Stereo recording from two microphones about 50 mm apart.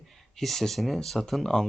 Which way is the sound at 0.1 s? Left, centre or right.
Centre.